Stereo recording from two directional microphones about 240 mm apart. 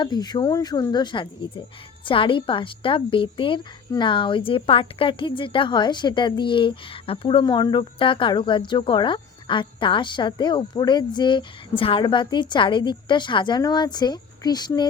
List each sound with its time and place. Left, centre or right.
0.0 s speech: centre